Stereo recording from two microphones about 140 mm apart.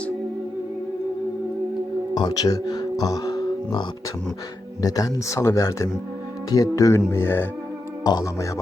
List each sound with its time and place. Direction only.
2.1 s speech: 30° left (ahead or behind)